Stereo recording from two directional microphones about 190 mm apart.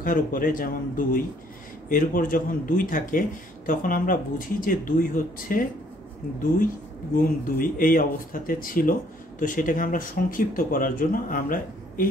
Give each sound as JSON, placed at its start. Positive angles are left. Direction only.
{"t": 0.0, "sound": "a man's voice", "side_deg": 45}
{"t": 7.2, "sound": "a man's voice", "side_deg": 45}